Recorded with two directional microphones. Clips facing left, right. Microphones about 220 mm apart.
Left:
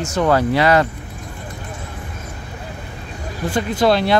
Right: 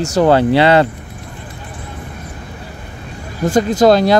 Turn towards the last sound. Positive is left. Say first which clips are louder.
# right 5 dB
turn(degrees=-45)  # may be behind; listen again after turning